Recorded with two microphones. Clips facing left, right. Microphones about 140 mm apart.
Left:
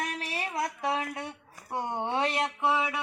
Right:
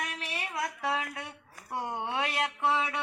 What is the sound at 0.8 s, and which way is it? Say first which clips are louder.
Speech: left 2 dB; 25° left (ahead or behind).